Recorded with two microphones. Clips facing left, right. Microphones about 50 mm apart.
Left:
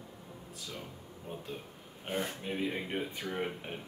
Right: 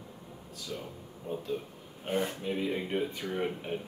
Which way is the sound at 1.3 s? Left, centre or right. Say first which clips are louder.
Right 7 dB; centre.